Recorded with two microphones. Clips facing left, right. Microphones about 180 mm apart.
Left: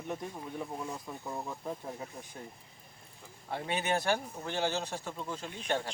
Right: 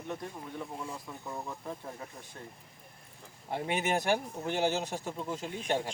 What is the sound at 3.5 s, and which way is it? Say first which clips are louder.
Speech: right 1 dB; 15° right (ahead or behind).